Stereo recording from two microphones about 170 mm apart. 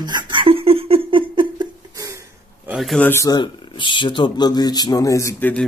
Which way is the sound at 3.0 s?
15° left (ahead or behind).